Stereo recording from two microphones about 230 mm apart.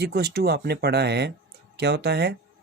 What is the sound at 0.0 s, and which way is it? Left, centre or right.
Speech, right.